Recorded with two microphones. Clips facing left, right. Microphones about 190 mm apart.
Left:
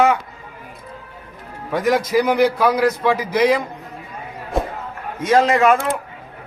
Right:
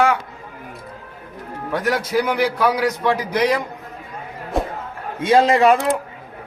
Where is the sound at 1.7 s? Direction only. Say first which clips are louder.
Left 3 dB; 10° left (ahead or behind).